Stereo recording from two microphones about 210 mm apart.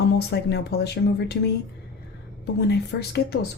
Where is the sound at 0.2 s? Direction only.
50° left (ahead or behind).